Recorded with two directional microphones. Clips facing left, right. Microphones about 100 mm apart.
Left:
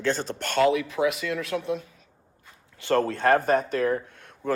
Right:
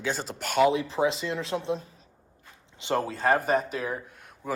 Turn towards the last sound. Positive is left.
turn(degrees=-5)  # may be behind; listen again after turning